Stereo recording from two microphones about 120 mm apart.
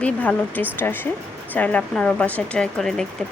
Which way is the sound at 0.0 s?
10° left (ahead or behind).